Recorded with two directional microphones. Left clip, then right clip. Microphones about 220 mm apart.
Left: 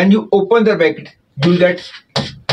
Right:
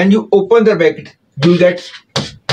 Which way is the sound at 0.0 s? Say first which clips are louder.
Right 2 dB; 10° right (ahead or behind).